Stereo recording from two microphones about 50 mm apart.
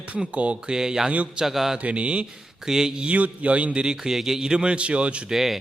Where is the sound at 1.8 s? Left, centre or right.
Right.